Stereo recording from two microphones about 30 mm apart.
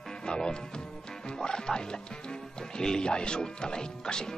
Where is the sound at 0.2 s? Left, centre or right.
Left.